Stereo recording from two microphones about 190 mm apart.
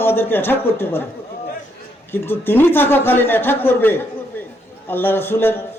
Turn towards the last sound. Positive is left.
turn(degrees=10)  # may be behind; listen again after turning